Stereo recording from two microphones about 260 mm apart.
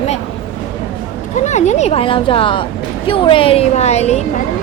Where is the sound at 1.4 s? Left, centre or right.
Left.